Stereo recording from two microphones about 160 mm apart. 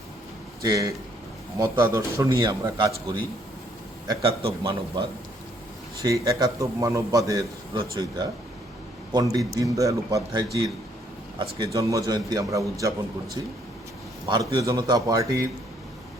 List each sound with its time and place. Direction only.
0.6 s a man's voice: 20° right (ahead or behind)
6.0 s a man's voice: 20° right (ahead or behind)